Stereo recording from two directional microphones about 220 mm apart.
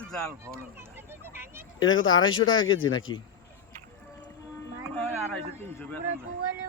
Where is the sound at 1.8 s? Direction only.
60° left (ahead or behind).